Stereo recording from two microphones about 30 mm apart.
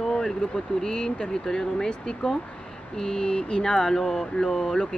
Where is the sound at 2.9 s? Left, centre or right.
Left.